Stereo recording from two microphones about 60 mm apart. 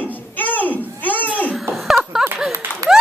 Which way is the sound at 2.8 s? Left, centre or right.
Right.